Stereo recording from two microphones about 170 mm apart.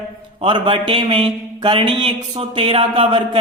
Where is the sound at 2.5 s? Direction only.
30° right (ahead or behind).